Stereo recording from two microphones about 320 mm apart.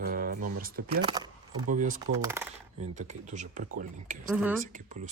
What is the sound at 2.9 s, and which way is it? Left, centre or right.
Speech, right.